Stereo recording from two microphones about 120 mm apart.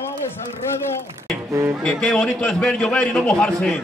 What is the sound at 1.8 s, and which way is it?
A man's voice, 5° left (ahead or behind).